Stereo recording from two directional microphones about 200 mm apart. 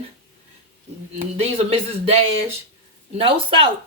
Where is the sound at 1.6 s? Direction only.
30° right (ahead or behind).